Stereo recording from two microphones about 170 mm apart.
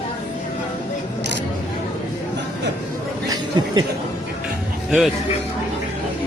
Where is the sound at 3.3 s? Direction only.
25° right (ahead or behind).